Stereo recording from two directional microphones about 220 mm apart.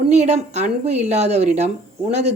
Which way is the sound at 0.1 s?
30° right (ahead or behind).